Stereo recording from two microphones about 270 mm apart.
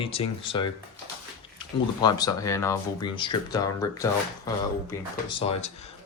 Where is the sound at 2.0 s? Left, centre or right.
Centre.